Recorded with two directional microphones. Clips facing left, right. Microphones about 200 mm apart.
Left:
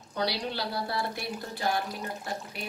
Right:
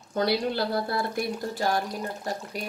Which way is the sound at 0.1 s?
50° right (ahead or behind).